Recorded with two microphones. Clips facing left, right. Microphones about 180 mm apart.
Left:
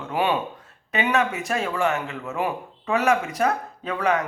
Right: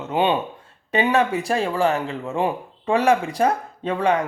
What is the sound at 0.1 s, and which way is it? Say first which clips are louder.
Speech: right 3 dB; 25° right (ahead or behind).